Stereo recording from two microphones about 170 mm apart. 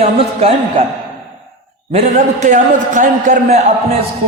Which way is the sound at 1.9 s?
40° right (ahead or behind).